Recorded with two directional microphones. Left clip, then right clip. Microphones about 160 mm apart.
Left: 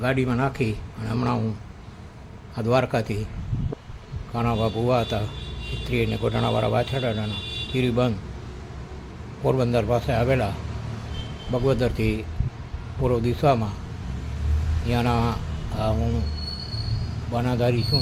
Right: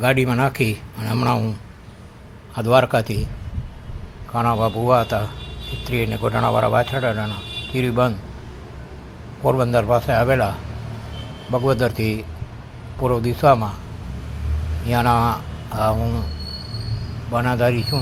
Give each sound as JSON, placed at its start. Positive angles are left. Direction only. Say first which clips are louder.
{"t": 0.0, "sound": "speech", "louder": "right 6 dB", "side_deg": -20}
{"t": 2.6, "sound": "speech", "louder": "right 6 dB", "side_deg": -5}
{"t": 4.3, "sound": "speech", "louder": "right 6 dB", "side_deg": 0}
{"t": 9.5, "sound": "speech", "louder": "right 5 dB", "side_deg": 10}
{"t": 11.5, "sound": "speech", "louder": "right 4 dB", "side_deg": 5}
{"t": 14.8, "sound": "speech", "louder": "right 7 dB", "side_deg": 0}
{"t": 17.3, "sound": "speech", "louder": "right 5 dB", "side_deg": 0}